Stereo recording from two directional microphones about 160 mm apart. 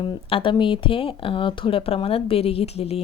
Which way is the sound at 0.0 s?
30° left (ahead or behind).